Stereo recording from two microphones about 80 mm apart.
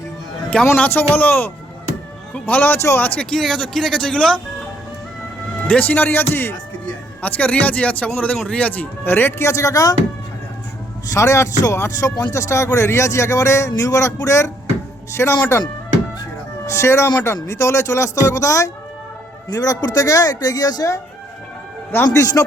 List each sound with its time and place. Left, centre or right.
0.5 s speech: centre
1.1 s speech: left
3.2 s speech: centre
5.6 s speech: centre; by 9.9 s left
11.1 s speech: left
16.6 s speech: left
22.1 s speech: left